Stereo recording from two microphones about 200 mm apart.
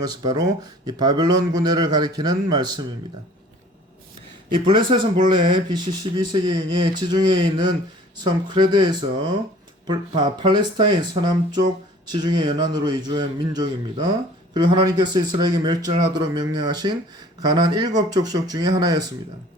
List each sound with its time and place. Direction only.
0.0 s speech: 20° right (ahead or behind)
4.5 s speech: 25° right (ahead or behind)